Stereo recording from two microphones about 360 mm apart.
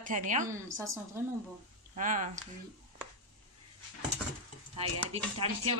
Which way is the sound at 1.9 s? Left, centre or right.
Right.